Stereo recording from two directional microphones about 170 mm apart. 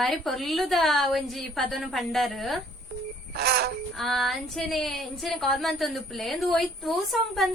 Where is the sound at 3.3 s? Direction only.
70° right (ahead or behind).